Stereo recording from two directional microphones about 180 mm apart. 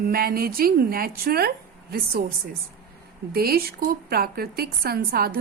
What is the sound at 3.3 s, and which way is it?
A woman's voice, 55° right (ahead or behind).